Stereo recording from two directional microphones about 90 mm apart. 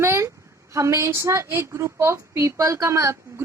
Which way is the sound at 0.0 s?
30° right (ahead or behind).